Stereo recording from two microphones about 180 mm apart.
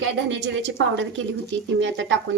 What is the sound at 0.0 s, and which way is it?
A woman's voice, 85° right.